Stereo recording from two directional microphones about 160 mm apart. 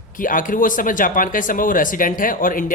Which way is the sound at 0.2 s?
55° left (ahead or behind).